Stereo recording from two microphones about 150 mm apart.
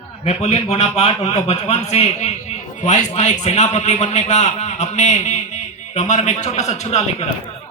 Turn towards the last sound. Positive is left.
turn(degrees=45)  # may be behind; listen again after turning